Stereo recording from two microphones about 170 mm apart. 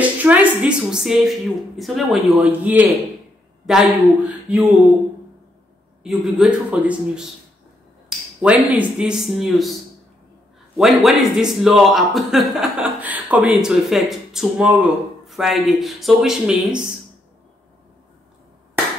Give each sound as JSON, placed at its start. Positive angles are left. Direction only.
{"t": 0.0, "sound": "a woman's voice", "side_deg": -10}
{"t": 6.0, "sound": "speech", "side_deg": 0}
{"t": 8.1, "sound": "finger snapping", "side_deg": -5}
{"t": 8.7, "sound": "speech", "side_deg": -5}
{"t": 10.8, "sound": "speech", "side_deg": 0}